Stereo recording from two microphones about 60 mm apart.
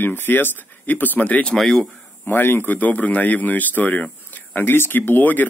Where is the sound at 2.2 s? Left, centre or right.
Left.